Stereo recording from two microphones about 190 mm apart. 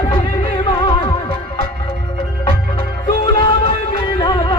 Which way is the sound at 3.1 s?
20° left (ahead or behind).